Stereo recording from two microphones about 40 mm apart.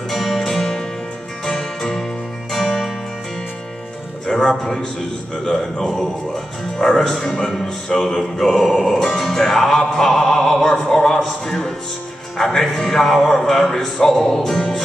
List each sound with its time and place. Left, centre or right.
0.1 s music: centre
4.3 s music: centre
5.4 s speech: centre
5.9 s music: centre